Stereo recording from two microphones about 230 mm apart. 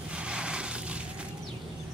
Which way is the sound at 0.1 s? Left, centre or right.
Centre.